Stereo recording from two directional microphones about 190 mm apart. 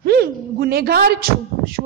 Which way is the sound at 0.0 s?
55° right (ahead or behind).